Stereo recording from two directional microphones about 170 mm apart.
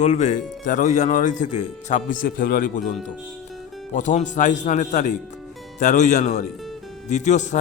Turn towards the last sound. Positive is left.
turn(degrees=45)  # may be behind; listen again after turning